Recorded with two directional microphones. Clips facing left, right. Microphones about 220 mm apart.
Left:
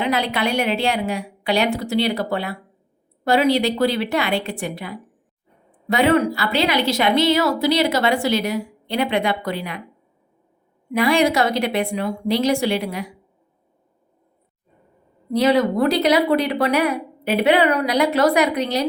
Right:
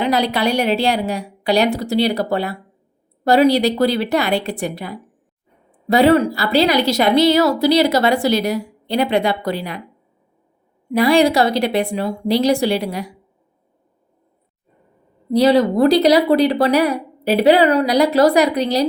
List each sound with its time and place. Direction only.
0.0 s a woman's voice: 35° right (ahead or behind)
10.9 s a woman's voice: 35° right (ahead or behind)
15.3 s a woman's voice: 35° right (ahead or behind)